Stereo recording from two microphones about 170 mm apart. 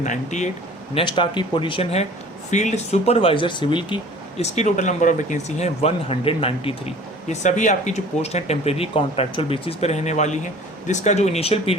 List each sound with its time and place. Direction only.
0.0 s speech: 45° left (ahead or behind)
0.9 s speech: 30° left (ahead or behind)
4.5 s speech: 45° left (ahead or behind)